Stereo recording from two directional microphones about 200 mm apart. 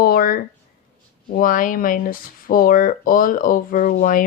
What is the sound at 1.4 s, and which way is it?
Speech, 45° left (ahead or behind).